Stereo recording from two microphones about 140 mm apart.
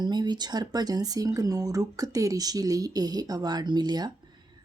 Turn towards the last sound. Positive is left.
turn(degrees=-30)  # may be behind; listen again after turning